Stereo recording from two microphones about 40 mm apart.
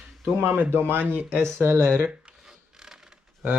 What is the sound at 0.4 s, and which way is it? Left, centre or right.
Speech, right.